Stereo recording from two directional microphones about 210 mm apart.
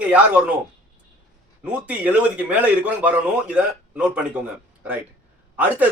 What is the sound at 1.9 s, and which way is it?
Speech, 5° right (ahead or behind).